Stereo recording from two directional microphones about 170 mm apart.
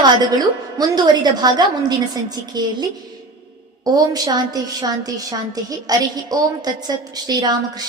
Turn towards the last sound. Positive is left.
turn(degrees=-25)  # may be behind; listen again after turning